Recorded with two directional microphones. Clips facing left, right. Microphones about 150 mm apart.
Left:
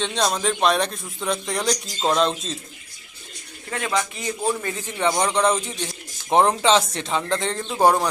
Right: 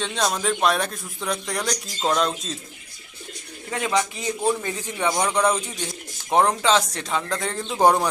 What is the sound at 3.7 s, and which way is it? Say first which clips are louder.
A man's voice: right 1 dB; 15° right (ahead or behind).